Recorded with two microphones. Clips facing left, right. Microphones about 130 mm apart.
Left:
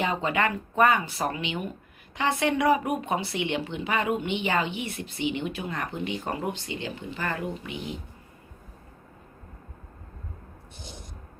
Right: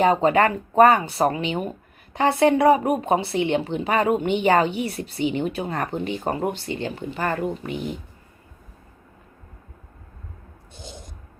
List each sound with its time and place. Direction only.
0.0 s speech: 40° right (ahead or behind)